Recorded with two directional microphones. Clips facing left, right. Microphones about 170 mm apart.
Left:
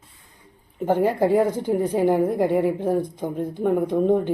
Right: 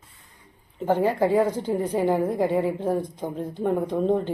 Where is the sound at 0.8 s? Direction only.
15° left (ahead or behind).